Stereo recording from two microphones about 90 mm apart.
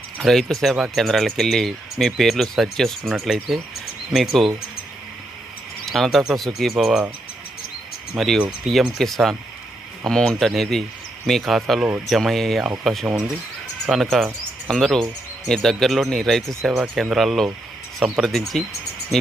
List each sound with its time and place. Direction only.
0.2 s speech: 5° left (ahead or behind)
5.8 s speech: centre (ahead or behind)
8.1 s speech: centre (ahead or behind)
16.7 s speech: 15° right (ahead or behind)
17.0 s speech: centre (ahead or behind)